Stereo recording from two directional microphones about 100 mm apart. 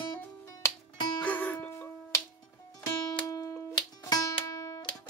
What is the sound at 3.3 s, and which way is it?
Music, 35° left (ahead or behind).